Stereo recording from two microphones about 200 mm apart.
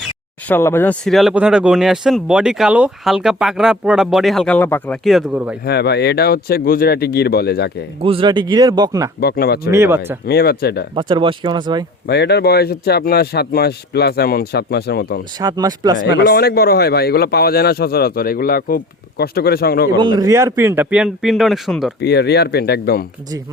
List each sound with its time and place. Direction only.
0.4 s speech: 10° left (ahead or behind)
5.0 s speech: centre (ahead or behind)
5.6 s speech: 55° left (ahead or behind)
8.0 s speech: 25° right (ahead or behind)
9.2 s speech: 50° left (ahead or behind)
9.7 s speech: 10° right (ahead or behind)
10.2 s speech: 50° left (ahead or behind)
10.9 s speech: 25° right (ahead or behind)
12.0 s speech: 55° left (ahead or behind)
15.4 s speech: 20° right (ahead or behind)
16.0 s speech: 60° left (ahead or behind)
20.0 s speech: 20° right (ahead or behind); by 21.9 s centre (ahead or behind)
22.0 s speech: 55° left (ahead or behind)